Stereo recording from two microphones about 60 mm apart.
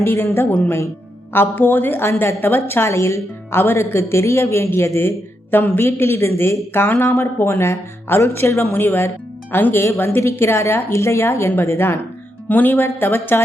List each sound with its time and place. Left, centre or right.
0.0 s a woman's voice: left
1.3 s a woman's voice: left
5.8 s a woman's voice: left
10.9 s speech: left
12.5 s a woman's voice: left